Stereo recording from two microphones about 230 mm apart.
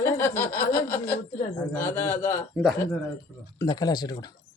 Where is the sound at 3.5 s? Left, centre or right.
Centre.